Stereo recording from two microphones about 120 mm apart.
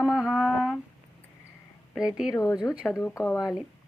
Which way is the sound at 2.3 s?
25° left (ahead or behind).